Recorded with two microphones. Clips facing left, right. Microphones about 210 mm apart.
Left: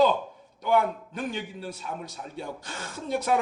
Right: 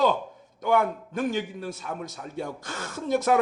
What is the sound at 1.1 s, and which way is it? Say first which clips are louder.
Speech: right 5 dB; 45° right (ahead or behind).